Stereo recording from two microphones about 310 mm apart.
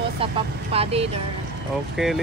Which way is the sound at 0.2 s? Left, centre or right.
Centre.